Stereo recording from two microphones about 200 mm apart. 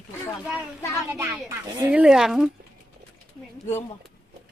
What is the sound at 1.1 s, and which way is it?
A woman's voice, 10° right (ahead or behind).